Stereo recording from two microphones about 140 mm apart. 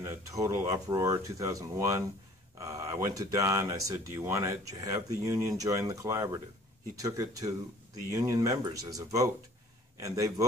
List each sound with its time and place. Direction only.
0.0 s speech: 20° right (ahead or behind)